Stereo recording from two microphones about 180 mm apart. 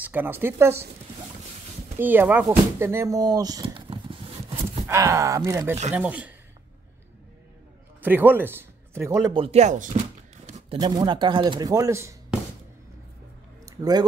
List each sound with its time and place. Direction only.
0.0 s speech: 10° right (ahead or behind)
2.0 s a sound: 10° right (ahead or behind); by 4.8 s 30° right (ahead or behind)
4.8 s speech: 15° right (ahead or behind)
8.0 s a man's voice: 10° right (ahead or behind)
9.3 s speech: 35° right (ahead or behind)
10.4 s a sound: 40° right (ahead or behind)
10.8 s speech: 25° right (ahead or behind)
13.7 s speech: 20° right (ahead or behind)